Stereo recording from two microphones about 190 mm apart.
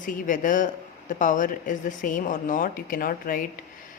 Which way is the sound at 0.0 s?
45° left (ahead or behind).